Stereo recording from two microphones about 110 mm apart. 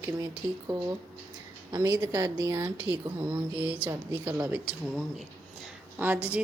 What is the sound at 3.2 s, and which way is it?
A woman's voice, 15° right (ahead or behind).